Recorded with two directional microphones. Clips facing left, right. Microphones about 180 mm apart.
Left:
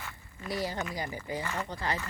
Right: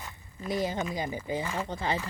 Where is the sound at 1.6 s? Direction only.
25° right (ahead or behind).